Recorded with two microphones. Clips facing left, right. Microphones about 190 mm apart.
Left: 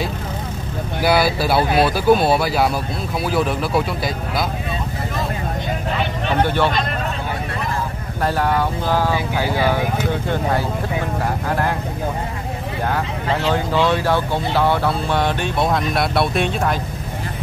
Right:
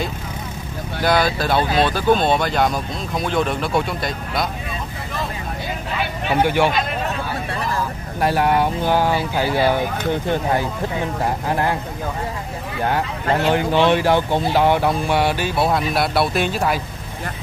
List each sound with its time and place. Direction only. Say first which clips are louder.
0.9 s speech: left 1 dB; 10° left (ahead or behind)
5.9 s a sound: right 1 dB; 10° right (ahead or behind)
8.2 s speech: right 2 dB; 15° right (ahead or behind)
13.5 s speech: right 2 dB; 15° right (ahead or behind)